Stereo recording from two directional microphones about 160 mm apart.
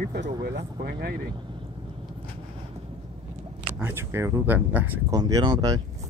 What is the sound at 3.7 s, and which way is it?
Speech, 15° right (ahead or behind).